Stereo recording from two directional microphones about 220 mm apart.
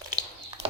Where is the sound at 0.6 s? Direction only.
50° right (ahead or behind).